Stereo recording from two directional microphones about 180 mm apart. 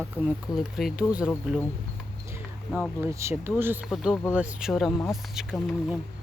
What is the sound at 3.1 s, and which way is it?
Speech, 15° right (ahead or behind).